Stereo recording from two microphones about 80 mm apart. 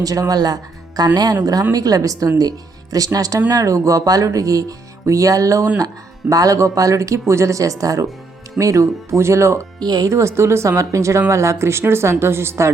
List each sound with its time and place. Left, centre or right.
0.0 s speech: right
9.8 s speech: right
10.1 s speech: right